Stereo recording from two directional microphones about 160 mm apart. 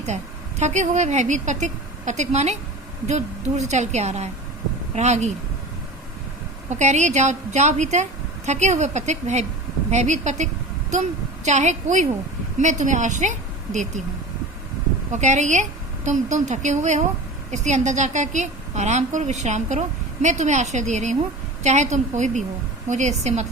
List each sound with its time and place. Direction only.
0.6 s a woman's voice: 45° right (ahead or behind)
6.7 s a woman's voice: 45° right (ahead or behind)
15.1 s a woman's voice: 45° right (ahead or behind)